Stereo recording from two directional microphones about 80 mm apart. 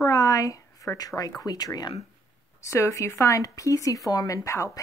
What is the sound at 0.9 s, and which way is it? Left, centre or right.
Speech, left.